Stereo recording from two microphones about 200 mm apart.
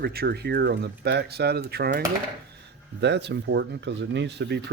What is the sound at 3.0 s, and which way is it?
Speech, 60° right (ahead or behind).